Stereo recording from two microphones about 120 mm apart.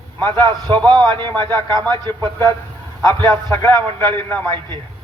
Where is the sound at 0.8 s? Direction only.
40° right (ahead or behind).